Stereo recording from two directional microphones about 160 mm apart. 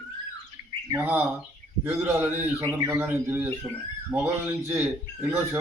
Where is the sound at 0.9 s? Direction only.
10° right (ahead or behind).